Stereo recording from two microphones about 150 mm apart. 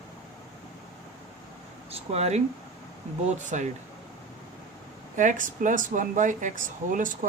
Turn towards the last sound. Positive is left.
turn(degrees=-60)  # may be behind; listen again after turning